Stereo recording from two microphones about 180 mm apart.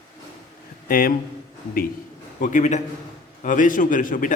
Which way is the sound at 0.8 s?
55° left (ahead or behind).